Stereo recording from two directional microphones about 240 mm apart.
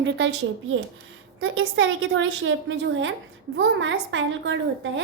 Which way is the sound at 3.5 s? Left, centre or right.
Right.